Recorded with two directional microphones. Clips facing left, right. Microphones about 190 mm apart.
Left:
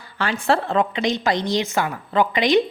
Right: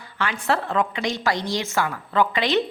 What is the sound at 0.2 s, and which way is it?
A woman's voice, 30° left (ahead or behind).